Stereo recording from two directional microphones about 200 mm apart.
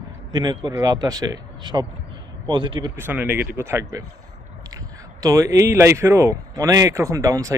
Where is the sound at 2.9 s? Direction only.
10° right (ahead or behind).